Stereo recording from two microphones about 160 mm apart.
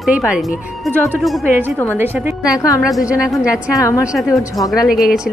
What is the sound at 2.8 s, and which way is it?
Speech, 5° right (ahead or behind).